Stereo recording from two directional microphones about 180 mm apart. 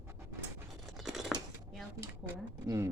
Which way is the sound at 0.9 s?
Centre (ahead or behind).